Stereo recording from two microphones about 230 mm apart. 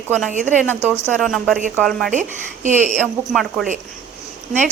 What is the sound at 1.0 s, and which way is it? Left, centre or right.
A woman's voice, centre.